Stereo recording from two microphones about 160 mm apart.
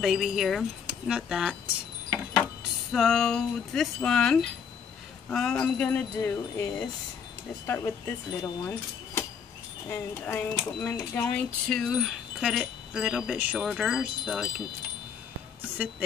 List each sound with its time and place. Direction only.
0.0 s wind chime: centre (ahead or behind)
2.4 s speech: centre (ahead or behind)
11.0 s wind chime: 5° left (ahead or behind)